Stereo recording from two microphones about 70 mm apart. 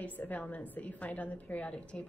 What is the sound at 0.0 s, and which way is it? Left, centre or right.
A woman's voice, left.